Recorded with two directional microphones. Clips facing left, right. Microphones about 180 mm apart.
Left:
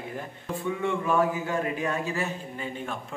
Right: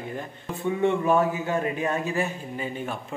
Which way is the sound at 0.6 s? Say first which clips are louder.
Right 5 dB; 25° right (ahead or behind).